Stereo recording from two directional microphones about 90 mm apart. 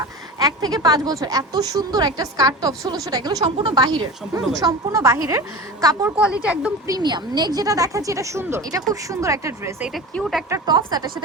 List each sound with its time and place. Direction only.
0.0 s speech: 45° right (ahead or behind)
6.1 s a woman's voice: 10° right (ahead or behind)
7.0 s speech: 55° right (ahead or behind); by 9.7 s 35° right (ahead or behind)
10.2 s speech: centre (ahead or behind)
10.7 s speech: 50° right (ahead or behind)